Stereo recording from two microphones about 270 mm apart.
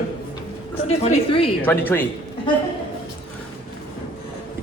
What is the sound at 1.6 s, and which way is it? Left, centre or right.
Speech, centre.